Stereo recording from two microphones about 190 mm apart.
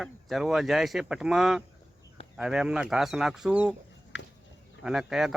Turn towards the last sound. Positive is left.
turn(degrees=0)  # may be behind; listen again after turning